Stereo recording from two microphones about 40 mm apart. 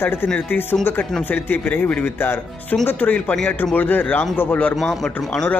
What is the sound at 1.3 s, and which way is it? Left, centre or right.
Speech, left.